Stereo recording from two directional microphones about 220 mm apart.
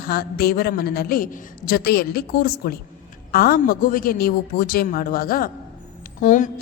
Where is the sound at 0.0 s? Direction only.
45° left (ahead or behind).